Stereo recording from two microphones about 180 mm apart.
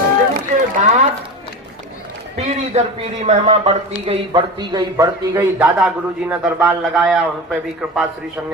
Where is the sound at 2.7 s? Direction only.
35° right (ahead or behind); by 5.5 s 20° right (ahead or behind).